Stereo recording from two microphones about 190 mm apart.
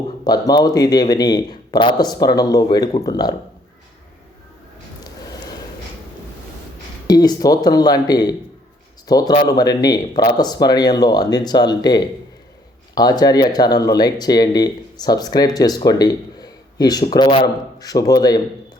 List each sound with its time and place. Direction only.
0.3 s speech: 20° left (ahead or behind)
7.1 s speech: 20° left (ahead or behind)